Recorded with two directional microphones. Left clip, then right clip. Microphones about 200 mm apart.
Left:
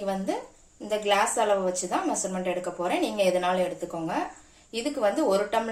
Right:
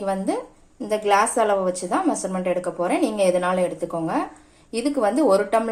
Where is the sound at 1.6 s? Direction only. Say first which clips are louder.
Right 5 dB; 35° right (ahead or behind).